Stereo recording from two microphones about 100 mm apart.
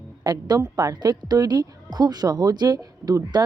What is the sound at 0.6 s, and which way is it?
Speech, 35° right (ahead or behind).